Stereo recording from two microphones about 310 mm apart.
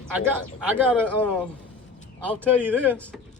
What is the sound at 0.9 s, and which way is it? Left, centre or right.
Speech, centre.